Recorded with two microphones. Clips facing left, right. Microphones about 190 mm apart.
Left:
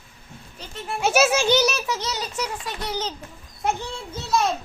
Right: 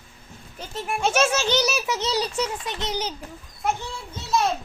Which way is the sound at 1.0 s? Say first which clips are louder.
Left 3 dB; 5° left (ahead or behind).